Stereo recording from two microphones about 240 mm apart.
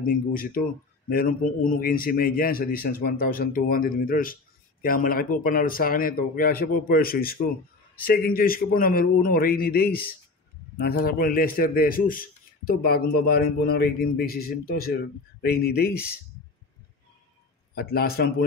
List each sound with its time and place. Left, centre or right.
0.0 s a man's voice: left
17.7 s a man's voice: left